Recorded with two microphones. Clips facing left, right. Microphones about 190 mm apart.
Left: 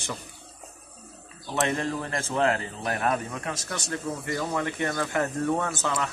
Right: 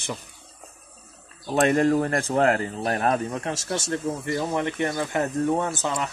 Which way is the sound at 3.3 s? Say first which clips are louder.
Right 5 dB; 25° right (ahead or behind).